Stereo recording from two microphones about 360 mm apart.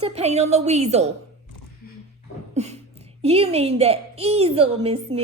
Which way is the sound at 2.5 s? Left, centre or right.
Centre.